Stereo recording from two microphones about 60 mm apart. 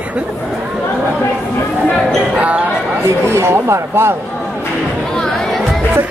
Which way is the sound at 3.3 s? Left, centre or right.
Right.